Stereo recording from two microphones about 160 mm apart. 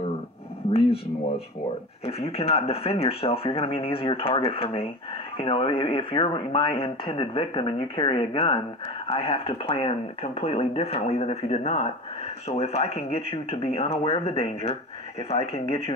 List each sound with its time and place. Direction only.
2.0 s speech: 40° left (ahead or behind)